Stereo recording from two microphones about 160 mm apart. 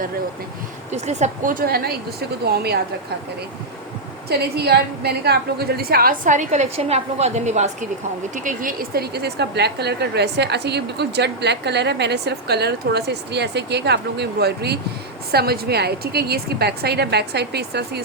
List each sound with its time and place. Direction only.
0.9 s speech: 45° right (ahead or behind); by 2.8 s 80° right
4.3 s a woman's voice: 85° right; by 7.9 s 45° right (ahead or behind)
8.4 s a woman's voice: 60° right (ahead or behind); by 18.0 s 90° right